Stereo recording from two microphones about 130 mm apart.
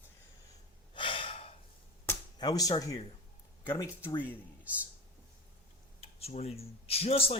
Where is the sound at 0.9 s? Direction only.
40° left (ahead or behind).